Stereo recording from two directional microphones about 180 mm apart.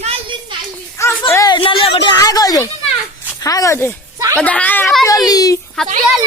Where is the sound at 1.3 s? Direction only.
20° left (ahead or behind).